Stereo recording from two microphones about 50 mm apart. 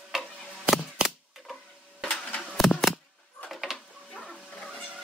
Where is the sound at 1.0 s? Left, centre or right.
Centre.